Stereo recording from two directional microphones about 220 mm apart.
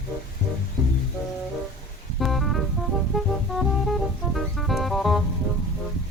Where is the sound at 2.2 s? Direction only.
Centre (ahead or behind).